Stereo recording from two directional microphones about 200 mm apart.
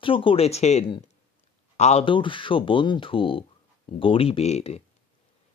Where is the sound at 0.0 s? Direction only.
25° left (ahead or behind).